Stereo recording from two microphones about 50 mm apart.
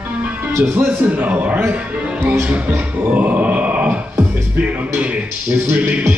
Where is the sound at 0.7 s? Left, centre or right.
Right.